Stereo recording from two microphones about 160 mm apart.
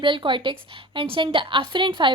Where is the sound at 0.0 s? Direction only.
30° right (ahead or behind).